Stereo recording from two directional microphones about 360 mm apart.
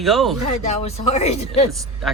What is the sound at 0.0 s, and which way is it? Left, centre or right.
Speech, centre.